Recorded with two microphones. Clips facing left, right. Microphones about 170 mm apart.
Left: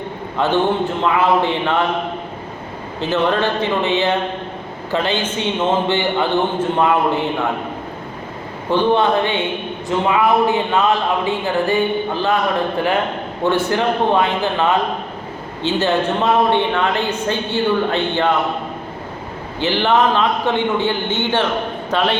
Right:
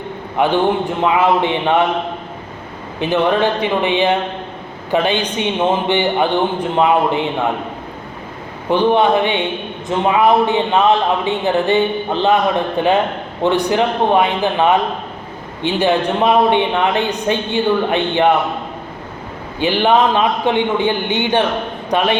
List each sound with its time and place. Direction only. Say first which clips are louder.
0.3 s a man's voice: right 2 dB; 15° right (ahead or behind)
3.0 s speech: right 3 dB; 15° right (ahead or behind)
8.7 s a man's voice: right 2 dB; 15° right (ahead or behind)
19.5 s a man's voice: right 2 dB; 15° right (ahead or behind)